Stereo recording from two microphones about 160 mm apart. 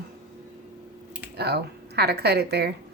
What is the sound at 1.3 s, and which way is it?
Speech, 90° right.